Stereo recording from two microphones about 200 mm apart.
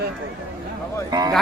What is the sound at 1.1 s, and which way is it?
Speech, 20° right (ahead or behind).